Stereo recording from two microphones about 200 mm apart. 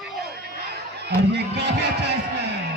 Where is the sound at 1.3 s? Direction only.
55° right (ahead or behind).